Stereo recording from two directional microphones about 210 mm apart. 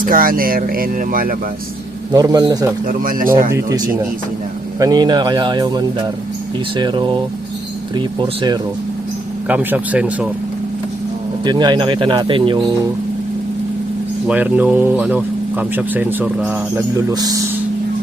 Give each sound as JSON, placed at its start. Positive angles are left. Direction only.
{"t": 0.0, "sound": "speech", "side_deg": -40}
{"t": 2.1, "sound": "speech", "side_deg": -20}
{"t": 2.8, "sound": "speech", "side_deg": -40}
{"t": 3.5, "sound": "speech", "side_deg": -15}
{"t": 9.5, "sound": "speech", "side_deg": -5}
{"t": 11.4, "sound": "speech", "side_deg": -20}
{"t": 14.3, "sound": "speech", "side_deg": -5}